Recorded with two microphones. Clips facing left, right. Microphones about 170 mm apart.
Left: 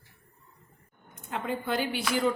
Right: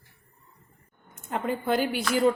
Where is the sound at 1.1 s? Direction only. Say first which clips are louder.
Right 3 dB; 50° right (ahead or behind).